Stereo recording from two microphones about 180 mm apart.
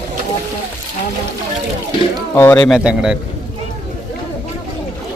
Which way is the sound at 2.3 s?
10° left (ahead or behind).